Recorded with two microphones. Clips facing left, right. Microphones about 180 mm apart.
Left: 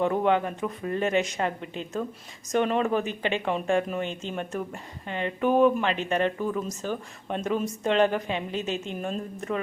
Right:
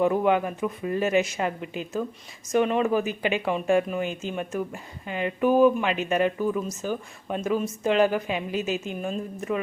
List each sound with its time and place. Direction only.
0.0 s speech: 5° right (ahead or behind)